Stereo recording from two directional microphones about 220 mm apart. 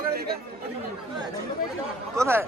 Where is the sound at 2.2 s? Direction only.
10° right (ahead or behind).